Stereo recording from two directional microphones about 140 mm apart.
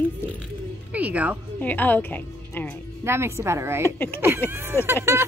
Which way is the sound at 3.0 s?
20° right (ahead or behind).